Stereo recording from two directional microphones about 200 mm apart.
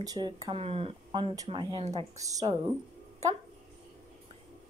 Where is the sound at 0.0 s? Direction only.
20° right (ahead or behind).